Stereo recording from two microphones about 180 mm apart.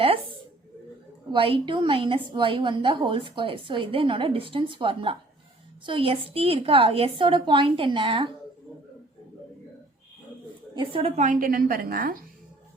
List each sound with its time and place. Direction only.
1.3 s a woman's voice: 30° right (ahead or behind)
10.8 s a woman's voice: 30° right (ahead or behind); by 12.2 s 50° right (ahead or behind)